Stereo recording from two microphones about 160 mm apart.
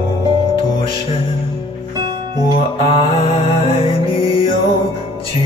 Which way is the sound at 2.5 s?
35° left (ahead or behind).